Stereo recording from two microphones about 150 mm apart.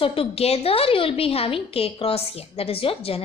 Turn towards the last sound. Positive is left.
turn(degrees=40)  # may be behind; listen again after turning